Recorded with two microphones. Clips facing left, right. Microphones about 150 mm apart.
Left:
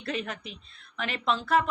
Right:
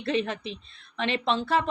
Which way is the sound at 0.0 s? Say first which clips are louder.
Right 6 dB; 25° right (ahead or behind).